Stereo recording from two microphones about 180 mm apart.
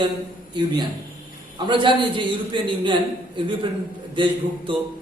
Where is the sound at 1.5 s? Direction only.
25° right (ahead or behind).